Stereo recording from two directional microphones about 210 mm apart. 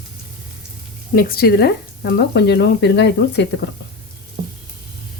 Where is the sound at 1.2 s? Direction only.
45° left (ahead or behind).